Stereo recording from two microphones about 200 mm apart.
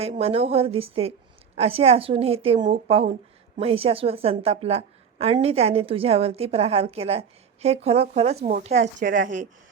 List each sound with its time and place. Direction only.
0.0 s a woman's voice: 30° right (ahead or behind); by 9.2 s 50° right (ahead or behind)